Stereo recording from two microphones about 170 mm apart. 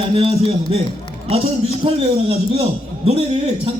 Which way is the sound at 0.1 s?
35° right (ahead or behind).